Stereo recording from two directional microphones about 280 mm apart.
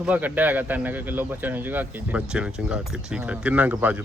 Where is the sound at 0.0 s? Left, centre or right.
Centre.